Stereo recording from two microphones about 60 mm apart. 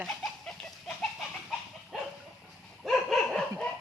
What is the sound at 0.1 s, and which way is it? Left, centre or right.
Chicken, centre.